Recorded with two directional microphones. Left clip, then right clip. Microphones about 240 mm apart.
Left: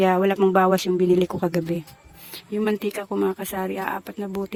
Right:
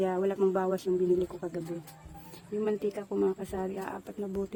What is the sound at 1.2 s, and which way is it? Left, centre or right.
Speech, left.